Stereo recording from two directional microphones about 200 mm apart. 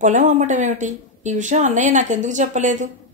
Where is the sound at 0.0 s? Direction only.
35° right (ahead or behind).